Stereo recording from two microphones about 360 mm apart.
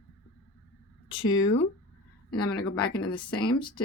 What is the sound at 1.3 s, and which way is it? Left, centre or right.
Speech, left.